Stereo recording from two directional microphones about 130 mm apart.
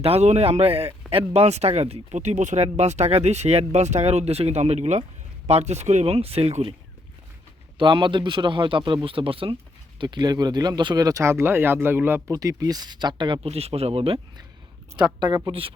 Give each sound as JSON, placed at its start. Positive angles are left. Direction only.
{"t": 0.0, "sound": "speech", "side_deg": -55}
{"t": 7.8, "sound": "speech", "side_deg": -35}
{"t": 13.5, "sound": "speech", "side_deg": -50}
{"t": 15.3, "sound": "speech", "side_deg": -35}